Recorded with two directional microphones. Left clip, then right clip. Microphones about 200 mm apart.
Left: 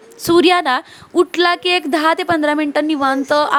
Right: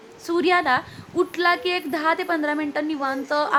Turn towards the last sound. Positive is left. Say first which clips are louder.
# left 8 dB
turn(degrees=40)  # may be behind; listen again after turning